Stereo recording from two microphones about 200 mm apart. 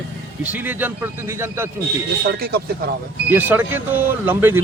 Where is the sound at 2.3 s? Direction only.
50° right (ahead or behind).